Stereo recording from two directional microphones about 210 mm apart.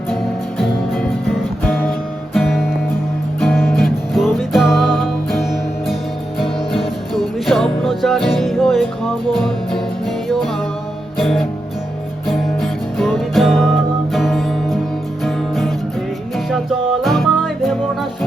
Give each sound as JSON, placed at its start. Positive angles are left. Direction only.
{"t": 2.3, "sound": "music", "side_deg": 0}
{"t": 7.1, "sound": "music", "side_deg": 0}